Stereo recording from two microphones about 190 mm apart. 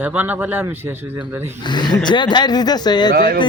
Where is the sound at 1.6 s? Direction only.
25° left (ahead or behind).